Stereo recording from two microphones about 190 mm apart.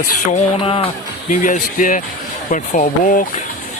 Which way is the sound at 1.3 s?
40° left (ahead or behind).